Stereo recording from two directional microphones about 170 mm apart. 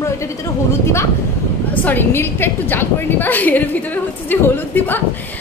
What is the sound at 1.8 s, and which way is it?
A woman's voice, 10° left (ahead or behind).